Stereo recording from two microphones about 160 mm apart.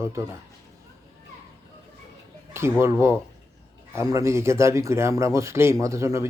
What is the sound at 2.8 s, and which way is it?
A man's voice, 15° right (ahead or behind).